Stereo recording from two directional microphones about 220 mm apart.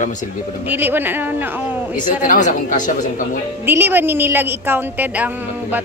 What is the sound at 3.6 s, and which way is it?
A woman's voice, 10° right (ahead or behind).